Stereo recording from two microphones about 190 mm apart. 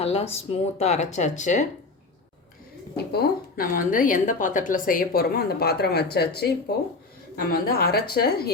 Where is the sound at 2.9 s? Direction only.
55° left (ahead or behind).